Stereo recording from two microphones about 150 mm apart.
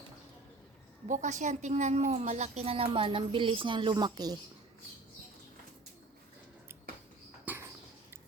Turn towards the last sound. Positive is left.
turn(degrees=-10)  # may be behind; listen again after turning